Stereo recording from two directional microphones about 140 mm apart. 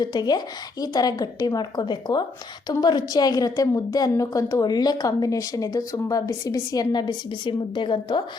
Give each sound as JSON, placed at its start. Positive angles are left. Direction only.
{"t": 0.0, "sound": "a woman's voice", "side_deg": 30}